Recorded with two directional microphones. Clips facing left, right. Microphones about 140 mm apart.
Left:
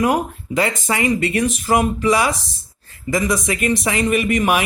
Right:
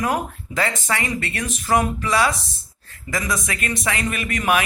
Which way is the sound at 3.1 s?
15° left (ahead or behind).